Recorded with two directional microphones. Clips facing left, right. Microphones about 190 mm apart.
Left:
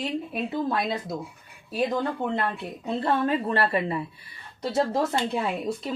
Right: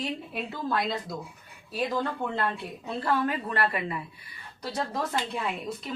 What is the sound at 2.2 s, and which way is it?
A woman's voice, 20° left (ahead or behind).